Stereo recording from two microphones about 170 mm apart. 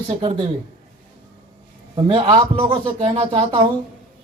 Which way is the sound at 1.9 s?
30° right (ahead or behind).